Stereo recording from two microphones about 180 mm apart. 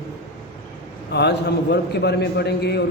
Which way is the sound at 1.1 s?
65° left (ahead or behind).